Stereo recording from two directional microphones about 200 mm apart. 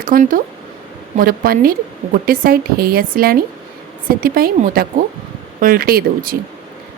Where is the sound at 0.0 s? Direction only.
45° right (ahead or behind).